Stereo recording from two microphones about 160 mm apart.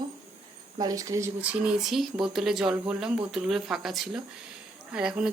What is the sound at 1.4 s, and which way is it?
Speech, 5° right (ahead or behind).